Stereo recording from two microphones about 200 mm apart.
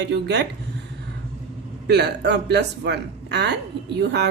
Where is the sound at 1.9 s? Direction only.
55° right (ahead or behind).